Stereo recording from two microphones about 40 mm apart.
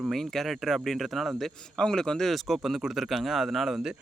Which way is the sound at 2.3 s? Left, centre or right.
Centre.